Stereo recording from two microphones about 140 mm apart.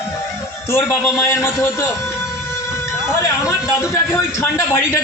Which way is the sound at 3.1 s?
20° left (ahead or behind).